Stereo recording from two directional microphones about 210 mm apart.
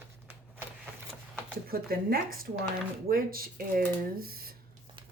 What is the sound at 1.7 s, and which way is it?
Speech, 45° right (ahead or behind).